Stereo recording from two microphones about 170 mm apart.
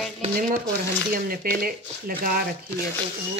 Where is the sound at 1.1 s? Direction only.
60° right (ahead or behind).